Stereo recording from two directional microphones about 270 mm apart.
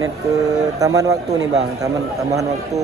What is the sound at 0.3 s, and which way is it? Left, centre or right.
Speech, centre.